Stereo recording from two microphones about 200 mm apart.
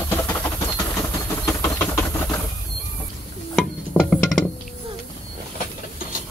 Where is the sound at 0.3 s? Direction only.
15° left (ahead or behind).